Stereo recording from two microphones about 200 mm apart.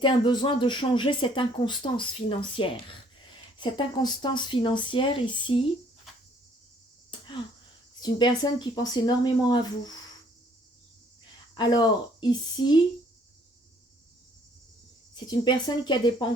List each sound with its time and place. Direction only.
0.0 s speech: 25° left (ahead or behind)
8.0 s speech: 20° left (ahead or behind)
11.5 s speech: 20° left (ahead or behind)
15.1 s speech: 20° left (ahead or behind)